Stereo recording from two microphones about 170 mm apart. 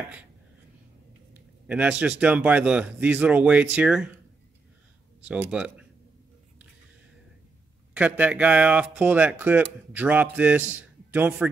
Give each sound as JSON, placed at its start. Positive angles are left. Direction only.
{"t": 1.7, "sound": "speech", "side_deg": -10}
{"t": 5.3, "sound": "speech", "side_deg": -5}
{"t": 7.9, "sound": "speech", "side_deg": -10}